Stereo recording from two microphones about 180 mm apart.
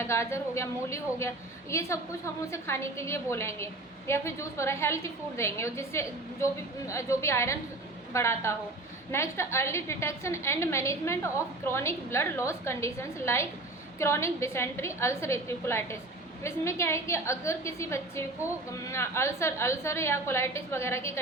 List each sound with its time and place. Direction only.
0.0 s a woman's voice: 15° left (ahead or behind)